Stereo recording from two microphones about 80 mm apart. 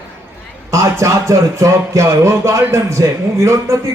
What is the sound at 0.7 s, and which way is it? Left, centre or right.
Speech, right.